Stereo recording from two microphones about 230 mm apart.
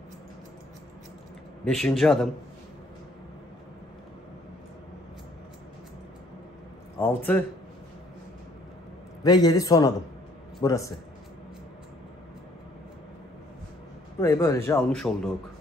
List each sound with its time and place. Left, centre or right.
1.6 s speech: centre
7.0 s a man's voice: centre
9.2 s a man's voice: centre
14.2 s a man's voice: centre